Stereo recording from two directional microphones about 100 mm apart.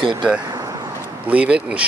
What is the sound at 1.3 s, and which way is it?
Speech, 15° right (ahead or behind).